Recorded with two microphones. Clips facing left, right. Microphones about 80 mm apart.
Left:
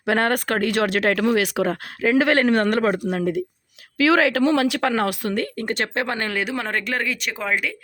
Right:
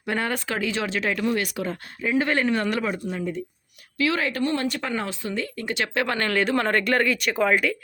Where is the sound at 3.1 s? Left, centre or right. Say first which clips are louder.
Left 6 dB; left.